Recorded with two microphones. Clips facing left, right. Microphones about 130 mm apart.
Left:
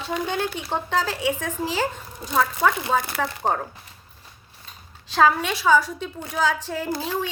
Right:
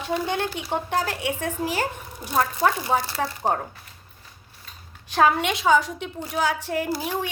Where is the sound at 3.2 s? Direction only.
25° right (ahead or behind).